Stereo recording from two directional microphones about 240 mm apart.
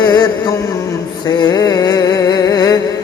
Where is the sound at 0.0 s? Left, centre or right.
Centre.